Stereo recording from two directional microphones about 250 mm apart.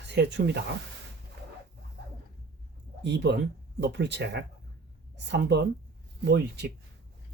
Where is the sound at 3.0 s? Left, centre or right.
Right.